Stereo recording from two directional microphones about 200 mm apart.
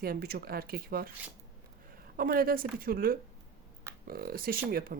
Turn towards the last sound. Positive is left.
turn(degrees=-45)  # may be behind; listen again after turning